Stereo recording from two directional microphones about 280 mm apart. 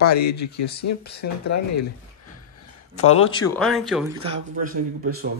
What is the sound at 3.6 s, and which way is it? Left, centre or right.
Speech, centre.